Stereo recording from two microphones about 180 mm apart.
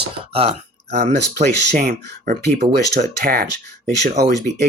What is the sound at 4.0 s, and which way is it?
Speech, 65° right (ahead or behind).